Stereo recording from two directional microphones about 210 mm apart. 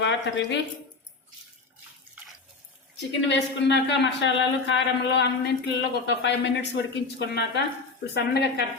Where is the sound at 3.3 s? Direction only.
55° left (ahead or behind).